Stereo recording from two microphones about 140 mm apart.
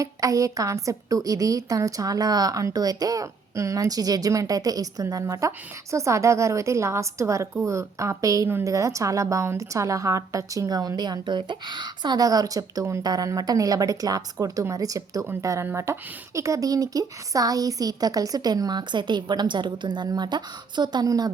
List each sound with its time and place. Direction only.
0.0 s a woman's voice: 25° right (ahead or behind)